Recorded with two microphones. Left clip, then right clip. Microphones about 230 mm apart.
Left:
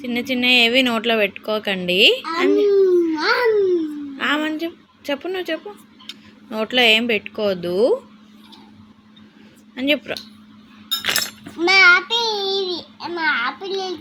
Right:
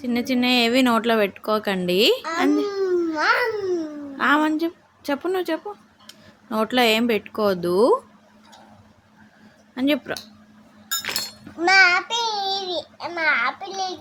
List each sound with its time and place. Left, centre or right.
0.0 s speech: right
2.7 s babbling: centre
4.2 s a woman's voice: right
9.7 s speech: right
11.0 s chink: left
11.6 s babbling: centre